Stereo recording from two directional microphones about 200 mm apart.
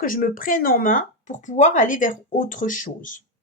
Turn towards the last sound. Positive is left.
turn(degrees=40)  # may be behind; listen again after turning